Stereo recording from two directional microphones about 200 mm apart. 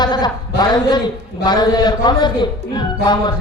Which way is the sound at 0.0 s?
20° left (ahead or behind).